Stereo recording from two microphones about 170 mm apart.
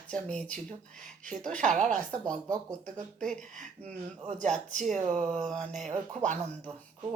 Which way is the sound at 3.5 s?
45° right (ahead or behind).